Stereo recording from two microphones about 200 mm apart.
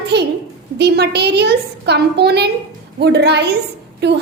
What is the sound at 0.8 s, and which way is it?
A woman's voice, 55° right (ahead or behind).